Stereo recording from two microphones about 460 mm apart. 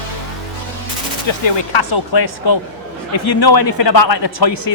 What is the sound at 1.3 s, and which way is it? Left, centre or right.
Speech, left.